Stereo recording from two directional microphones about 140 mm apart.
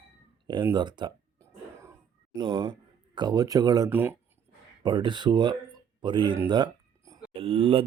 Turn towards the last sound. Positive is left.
turn(degrees=-40)  # may be behind; listen again after turning